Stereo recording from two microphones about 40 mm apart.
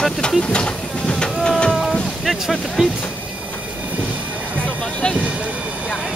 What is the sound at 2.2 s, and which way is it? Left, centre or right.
Speech, centre.